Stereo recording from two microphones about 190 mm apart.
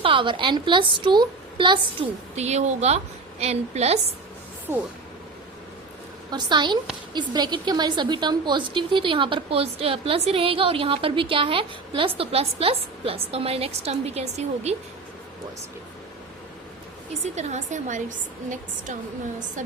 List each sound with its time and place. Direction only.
0.0 s a woman's voice: 25° right (ahead or behind)
2.3 s a woman's voice: 35° right (ahead or behind)
6.3 s a woman's voice: 25° right (ahead or behind)
17.3 s a woman's voice: 40° right (ahead or behind)